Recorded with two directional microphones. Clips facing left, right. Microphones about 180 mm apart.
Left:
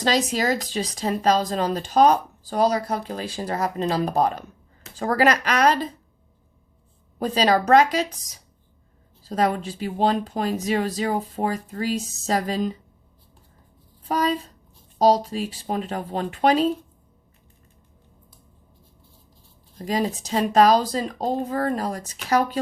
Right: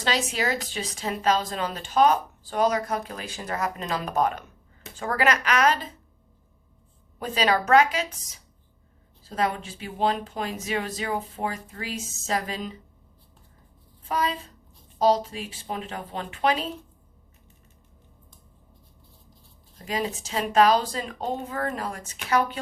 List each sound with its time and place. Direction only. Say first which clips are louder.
0.0 s speech: left 5 dB; 40° left (ahead or behind)
7.2 s speech: left 4 dB; 40° left (ahead or behind)
9.2 s speech: left 5 dB; 40° left (ahead or behind)
14.1 s speech: left 4 dB; 40° left (ahead or behind)
19.8 s speech: left 5 dB; 40° left (ahead or behind)